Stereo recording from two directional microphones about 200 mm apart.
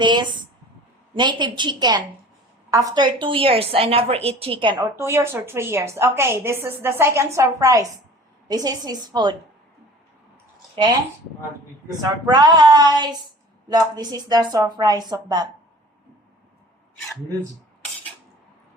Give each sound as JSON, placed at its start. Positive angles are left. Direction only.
{"t": 0.0, "sound": "a woman's voice", "side_deg": -20}
{"t": 12.0, "sound": "a woman's voice", "side_deg": -20}